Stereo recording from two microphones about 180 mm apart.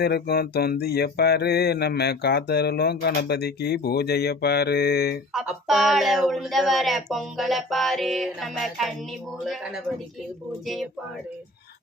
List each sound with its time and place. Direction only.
0.0 s speech: 60° left (ahead or behind)
5.3 s speech: centre (ahead or behind)